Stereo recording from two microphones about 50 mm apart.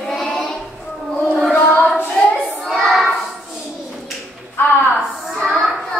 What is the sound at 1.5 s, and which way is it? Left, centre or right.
Child singing, left.